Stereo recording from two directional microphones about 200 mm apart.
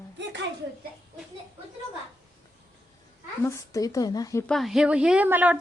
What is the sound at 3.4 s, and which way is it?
A woman's voice, 15° left (ahead or behind).